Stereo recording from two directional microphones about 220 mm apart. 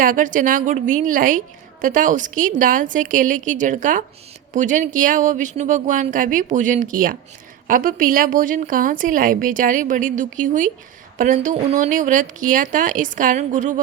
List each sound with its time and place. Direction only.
0.0 s a woman's voice: 40° right (ahead or behind)